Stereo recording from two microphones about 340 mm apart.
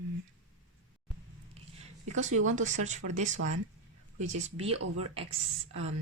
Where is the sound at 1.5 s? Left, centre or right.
Centre.